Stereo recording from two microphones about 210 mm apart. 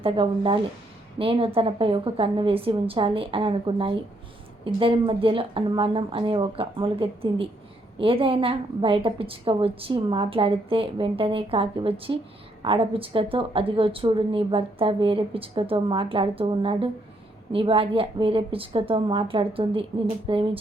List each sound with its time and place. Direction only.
0.0 s a woman's voice: 25° right (ahead or behind)